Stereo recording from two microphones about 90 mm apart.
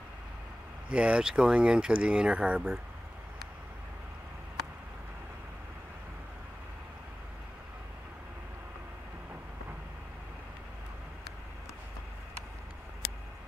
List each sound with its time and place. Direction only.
0.8 s speech: 10° right (ahead or behind)